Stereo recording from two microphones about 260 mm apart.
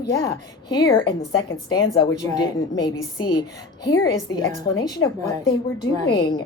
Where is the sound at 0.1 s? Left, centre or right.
Centre.